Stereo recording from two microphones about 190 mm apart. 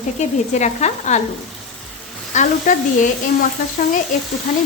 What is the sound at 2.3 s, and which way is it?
Sizzle, 40° left (ahead or behind).